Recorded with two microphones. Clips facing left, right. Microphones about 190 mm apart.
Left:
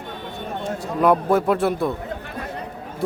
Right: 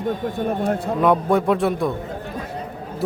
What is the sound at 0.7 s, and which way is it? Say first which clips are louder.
Speech: right 6 dB; 60° right (ahead or behind).